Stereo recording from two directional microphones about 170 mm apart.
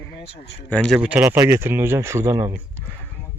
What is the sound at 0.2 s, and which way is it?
Speech, 85° left.